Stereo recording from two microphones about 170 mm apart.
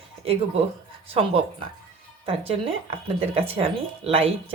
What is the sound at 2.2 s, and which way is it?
Speech, 35° right (ahead or behind).